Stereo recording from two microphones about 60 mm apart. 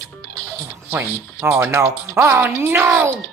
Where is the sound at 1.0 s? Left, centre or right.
Right.